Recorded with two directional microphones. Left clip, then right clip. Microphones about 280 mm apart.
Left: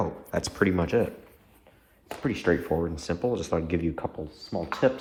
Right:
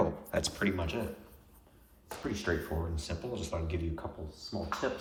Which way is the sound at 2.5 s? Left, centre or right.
Left.